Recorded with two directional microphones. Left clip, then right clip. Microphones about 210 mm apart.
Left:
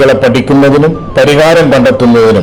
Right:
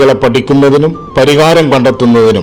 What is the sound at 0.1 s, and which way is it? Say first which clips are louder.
A man's voice: left 2 dB; 30° right (ahead or behind).